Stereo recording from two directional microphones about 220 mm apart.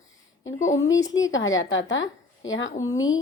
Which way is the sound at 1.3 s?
60° left (ahead or behind).